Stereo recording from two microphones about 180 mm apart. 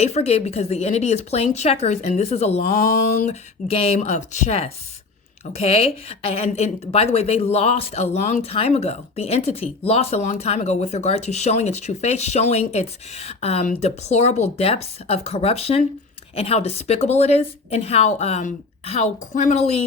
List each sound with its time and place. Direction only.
0.0 s speech: 35° left (ahead or behind)